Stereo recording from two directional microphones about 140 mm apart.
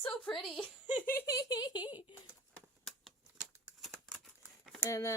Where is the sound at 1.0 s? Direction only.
15° left (ahead or behind); by 2.0 s 30° left (ahead or behind).